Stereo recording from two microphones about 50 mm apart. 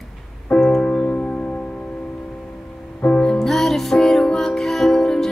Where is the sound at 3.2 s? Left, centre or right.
Centre.